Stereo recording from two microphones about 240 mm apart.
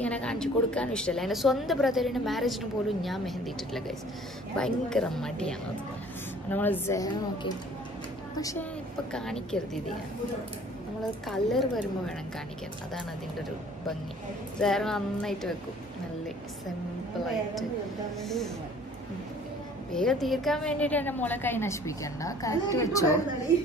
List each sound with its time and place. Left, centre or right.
0.0 s a woman's voice: centre
9.1 s speech: centre
11.2 s speech: centre
12.9 s speech: centre
19.9 s a woman's voice: centre